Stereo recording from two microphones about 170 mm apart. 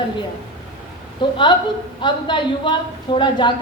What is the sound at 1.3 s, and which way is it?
A woman's voice, 30° left (ahead or behind).